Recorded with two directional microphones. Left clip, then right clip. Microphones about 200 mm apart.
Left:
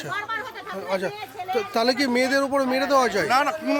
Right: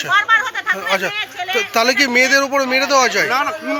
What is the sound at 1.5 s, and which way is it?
Speech, 10° left (ahead or behind).